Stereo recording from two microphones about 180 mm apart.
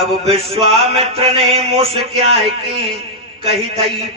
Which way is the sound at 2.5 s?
30° right (ahead or behind).